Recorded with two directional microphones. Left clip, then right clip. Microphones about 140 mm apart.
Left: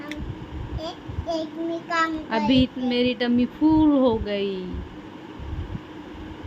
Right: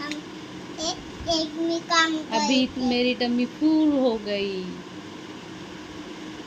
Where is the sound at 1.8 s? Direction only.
30° left (ahead or behind).